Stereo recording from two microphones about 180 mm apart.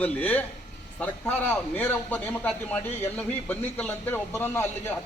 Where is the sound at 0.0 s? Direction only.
10° left (ahead or behind).